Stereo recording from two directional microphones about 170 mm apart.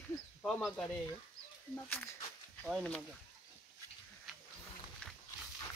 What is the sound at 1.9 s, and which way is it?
Speech, 10° left (ahead or behind).